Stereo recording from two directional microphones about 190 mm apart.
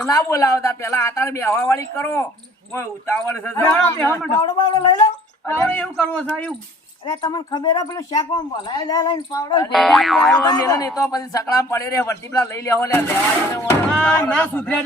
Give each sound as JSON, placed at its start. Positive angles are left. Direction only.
{"t": 0.0, "sound": "a man's voice", "side_deg": 15}
{"t": 4.4, "sound": "a woman's voice", "side_deg": 20}
{"t": 5.5, "sound": "a man's voice", "side_deg": 10}
{"t": 7.2, "sound": "a woman's voice", "side_deg": 20}
{"t": 9.7, "sound": "a man's voice", "side_deg": 0}
{"t": 10.4, "sound": "a man's voice", "side_deg": 20}